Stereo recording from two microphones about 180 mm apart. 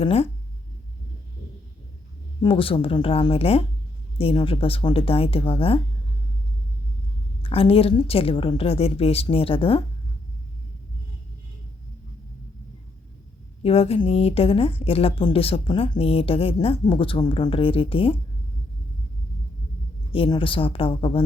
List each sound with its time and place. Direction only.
0.0 s a woman's voice: 35° left (ahead or behind)
2.4 s a woman's voice: 30° left (ahead or behind)
7.5 s a woman's voice: 30° left (ahead or behind)
13.6 s a woman's voice: 35° left (ahead or behind)
20.1 s speech: 30° left (ahead or behind)